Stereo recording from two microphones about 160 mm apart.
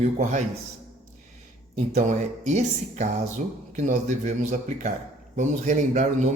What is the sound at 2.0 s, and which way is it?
Speech, 50° right (ahead or behind).